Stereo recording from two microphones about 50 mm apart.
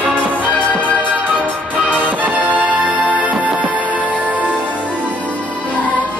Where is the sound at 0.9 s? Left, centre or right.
Right.